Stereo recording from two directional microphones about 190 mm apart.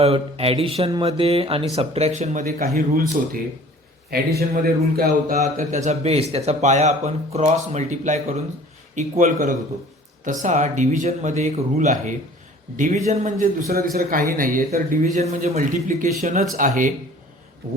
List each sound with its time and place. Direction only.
0.0 s a man's voice: 30° right (ahead or behind); by 5.4 s 50° right (ahead or behind)
5.4 s a man's voice: 40° right (ahead or behind)